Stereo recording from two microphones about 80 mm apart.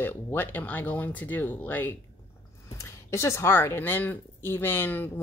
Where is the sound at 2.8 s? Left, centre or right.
Left.